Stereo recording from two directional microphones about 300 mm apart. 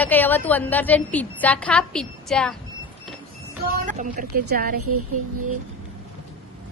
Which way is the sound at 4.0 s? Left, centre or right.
Right.